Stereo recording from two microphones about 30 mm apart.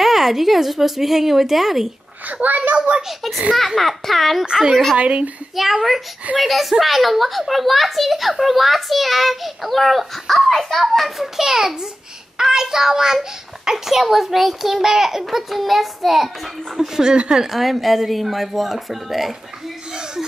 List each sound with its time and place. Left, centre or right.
0.0 s a child's voice: centre
2.4 s a child's voice: right
3.5 s a child's voice: centre
4.5 s a child's voice: right
4.9 s speech: right
5.6 s a child's voice: centre
11.3 s a child's voice: centre
17.0 s a child's voice: right
17.5 s a child's voice: centre